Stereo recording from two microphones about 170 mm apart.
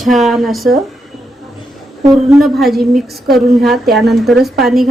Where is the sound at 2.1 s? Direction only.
Centre (ahead or behind).